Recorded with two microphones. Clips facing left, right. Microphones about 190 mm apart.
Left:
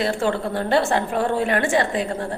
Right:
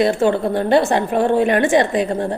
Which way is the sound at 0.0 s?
20° right (ahead or behind).